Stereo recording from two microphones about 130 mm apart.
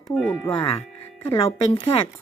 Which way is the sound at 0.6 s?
45° left (ahead or behind).